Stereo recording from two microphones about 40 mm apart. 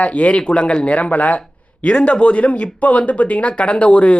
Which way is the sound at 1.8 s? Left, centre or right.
Left.